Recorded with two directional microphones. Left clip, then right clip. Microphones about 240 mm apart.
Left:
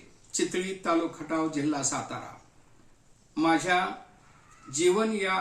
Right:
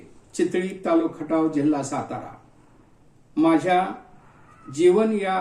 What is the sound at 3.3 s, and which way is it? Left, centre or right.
Speech, centre.